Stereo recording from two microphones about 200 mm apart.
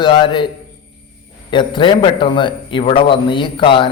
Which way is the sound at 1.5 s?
25° left (ahead or behind).